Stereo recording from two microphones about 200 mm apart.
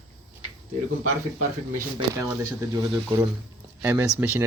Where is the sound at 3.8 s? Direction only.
10° right (ahead or behind).